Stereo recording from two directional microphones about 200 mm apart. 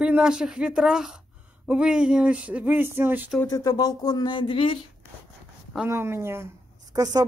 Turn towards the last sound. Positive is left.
turn(degrees=-20)  # may be behind; listen again after turning